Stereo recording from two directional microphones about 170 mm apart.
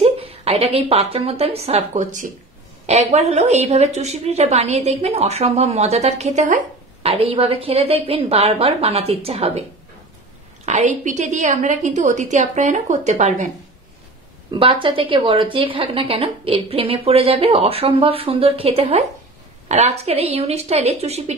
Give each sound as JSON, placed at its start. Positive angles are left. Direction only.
{"t": 0.0, "sound": "a woman's voice", "side_deg": -35}
{"t": 14.5, "sound": "a woman's voice", "side_deg": -30}